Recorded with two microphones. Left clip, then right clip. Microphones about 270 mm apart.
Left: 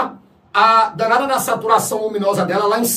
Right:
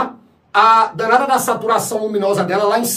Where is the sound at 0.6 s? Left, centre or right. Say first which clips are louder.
Even; centre.